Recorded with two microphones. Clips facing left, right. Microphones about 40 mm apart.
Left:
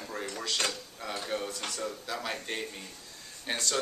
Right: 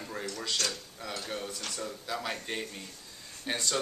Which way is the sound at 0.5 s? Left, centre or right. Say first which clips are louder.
Left 3 dB; left.